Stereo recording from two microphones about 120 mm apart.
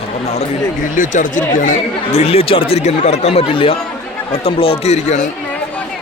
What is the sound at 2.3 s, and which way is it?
Speech, 50° left (ahead or behind).